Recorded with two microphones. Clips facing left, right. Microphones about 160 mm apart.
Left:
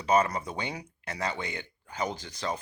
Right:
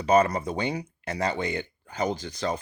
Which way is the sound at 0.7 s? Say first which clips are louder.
Right 7 dB; 30° right (ahead or behind).